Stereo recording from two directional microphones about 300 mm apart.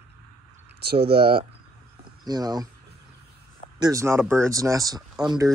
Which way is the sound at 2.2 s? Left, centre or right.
Centre.